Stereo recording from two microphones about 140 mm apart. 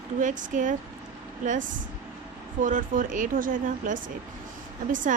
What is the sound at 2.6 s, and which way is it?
A woman's voice, 70° right (ahead or behind).